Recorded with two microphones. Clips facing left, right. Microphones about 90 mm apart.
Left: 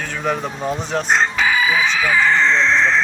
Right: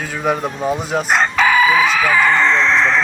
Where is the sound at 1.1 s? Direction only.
65° right (ahead or behind).